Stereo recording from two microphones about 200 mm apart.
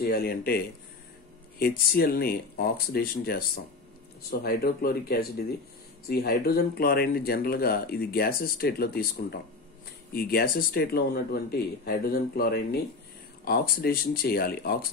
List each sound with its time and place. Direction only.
0.0 s speech: 50° left (ahead or behind)